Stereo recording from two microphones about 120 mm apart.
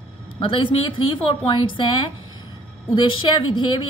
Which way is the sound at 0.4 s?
45° left (ahead or behind).